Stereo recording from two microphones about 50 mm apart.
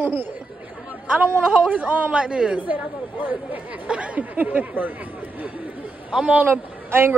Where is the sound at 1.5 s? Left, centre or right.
Right.